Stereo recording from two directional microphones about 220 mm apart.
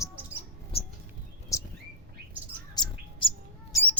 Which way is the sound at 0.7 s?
25° left (ahead or behind).